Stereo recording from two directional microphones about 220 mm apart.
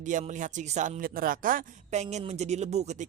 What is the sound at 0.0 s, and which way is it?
Speech, 35° right (ahead or behind).